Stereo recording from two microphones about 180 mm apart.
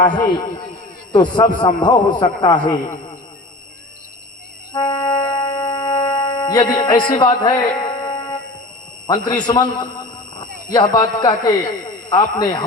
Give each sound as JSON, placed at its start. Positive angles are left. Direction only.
{"t": 0.2, "sound": "a man's voice", "side_deg": 25}
{"t": 4.7, "sound": "music", "side_deg": 25}
{"t": 9.0, "sound": "a man's voice", "side_deg": 25}